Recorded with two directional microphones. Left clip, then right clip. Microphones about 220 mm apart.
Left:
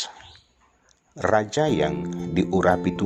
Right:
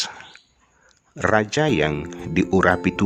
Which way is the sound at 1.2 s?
20° right (ahead or behind).